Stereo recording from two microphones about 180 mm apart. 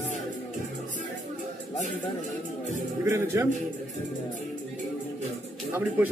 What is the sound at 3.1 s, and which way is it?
Speech, 15° right (ahead or behind).